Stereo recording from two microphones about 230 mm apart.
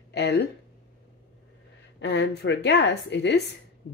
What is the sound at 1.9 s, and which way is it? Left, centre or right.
Speech, left.